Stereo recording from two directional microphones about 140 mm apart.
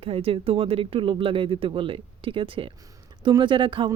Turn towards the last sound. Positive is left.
turn(degrees=-35)  # may be behind; listen again after turning